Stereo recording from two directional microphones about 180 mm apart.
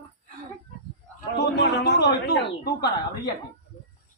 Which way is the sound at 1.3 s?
70° left (ahead or behind).